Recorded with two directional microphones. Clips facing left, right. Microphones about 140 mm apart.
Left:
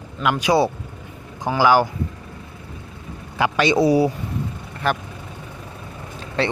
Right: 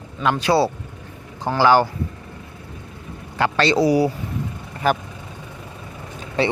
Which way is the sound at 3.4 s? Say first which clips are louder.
Even; 10° left (ahead or behind).